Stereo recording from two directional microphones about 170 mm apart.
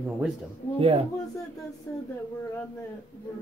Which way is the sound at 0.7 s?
35° right (ahead or behind).